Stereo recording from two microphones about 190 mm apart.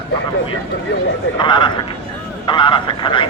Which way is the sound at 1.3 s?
25° left (ahead or behind).